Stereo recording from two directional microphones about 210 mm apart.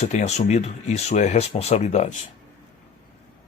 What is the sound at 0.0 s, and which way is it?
Speech, 35° left (ahead or behind).